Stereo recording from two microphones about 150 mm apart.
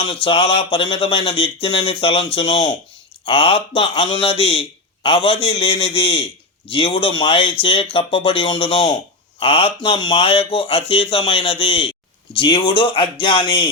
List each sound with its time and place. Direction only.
0.0 s speech: 35° left (ahead or behind)